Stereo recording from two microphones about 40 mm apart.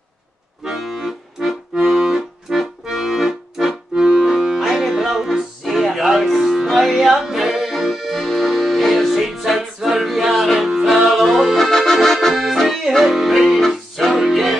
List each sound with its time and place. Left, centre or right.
0.7 s accordion: centre
3.9 s accordion: centre
4.3 s music: centre
11.5 s accordion: centre
12.4 s accordion: centre
12.9 s music: centre